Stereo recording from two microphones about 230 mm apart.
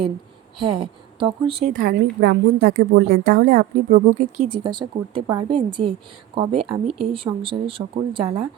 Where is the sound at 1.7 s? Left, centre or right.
Right.